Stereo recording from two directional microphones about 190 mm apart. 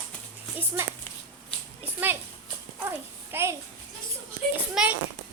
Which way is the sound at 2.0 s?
10° right (ahead or behind).